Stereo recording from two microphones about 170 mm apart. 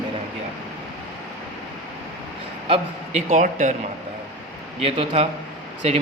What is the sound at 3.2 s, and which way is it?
Speech, 45° right (ahead or behind).